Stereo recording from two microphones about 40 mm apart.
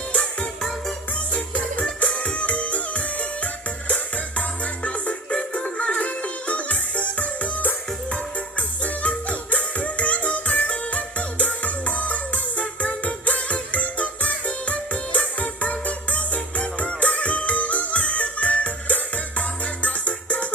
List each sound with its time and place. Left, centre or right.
0.1 s music: left
1.8 s music: left
8.8 s music: left